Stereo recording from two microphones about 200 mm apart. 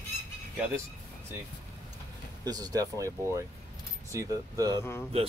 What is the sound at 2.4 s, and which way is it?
Speech, 20° right (ahead or behind).